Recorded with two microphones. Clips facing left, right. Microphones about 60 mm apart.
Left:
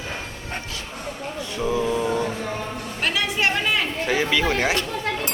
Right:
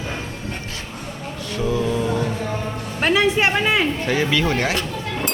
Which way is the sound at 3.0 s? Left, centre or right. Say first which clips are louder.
Right 6 dB; right.